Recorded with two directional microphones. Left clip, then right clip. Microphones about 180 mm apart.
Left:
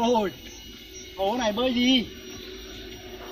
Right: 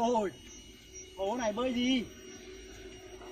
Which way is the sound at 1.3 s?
Centre (ahead or behind).